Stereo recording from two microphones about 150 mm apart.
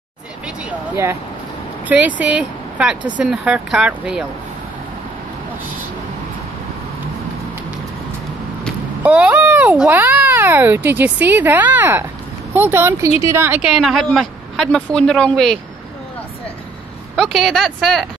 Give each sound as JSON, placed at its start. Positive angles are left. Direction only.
{"t": 0.7, "sound": "a sound", "side_deg": -20}
{"t": 1.9, "sound": "speech", "side_deg": -10}
{"t": 9.0, "sound": "a woman's voice", "side_deg": -10}
{"t": 17.1, "sound": "a woman's voice", "side_deg": 0}